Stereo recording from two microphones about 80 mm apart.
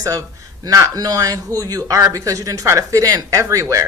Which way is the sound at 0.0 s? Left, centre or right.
Right.